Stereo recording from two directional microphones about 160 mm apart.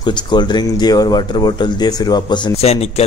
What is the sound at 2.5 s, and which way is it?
Speech, 40° left (ahead or behind).